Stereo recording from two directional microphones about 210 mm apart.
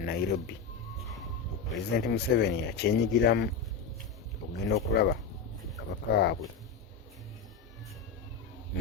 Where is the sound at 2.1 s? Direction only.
50° left (ahead or behind).